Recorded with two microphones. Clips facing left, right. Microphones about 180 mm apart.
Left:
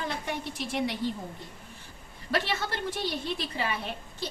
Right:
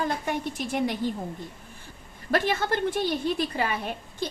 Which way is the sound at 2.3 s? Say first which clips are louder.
Right 5 dB; 50° right (ahead or behind).